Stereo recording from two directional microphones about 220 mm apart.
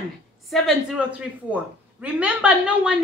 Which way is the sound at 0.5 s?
Centre (ahead or behind).